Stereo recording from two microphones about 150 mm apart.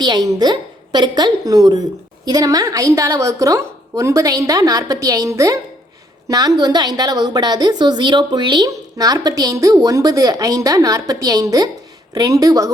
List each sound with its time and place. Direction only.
0.0 s a woman's voice: 30° right (ahead or behind)